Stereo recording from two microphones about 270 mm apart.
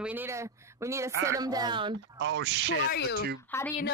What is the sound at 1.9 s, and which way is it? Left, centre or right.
Speech, right.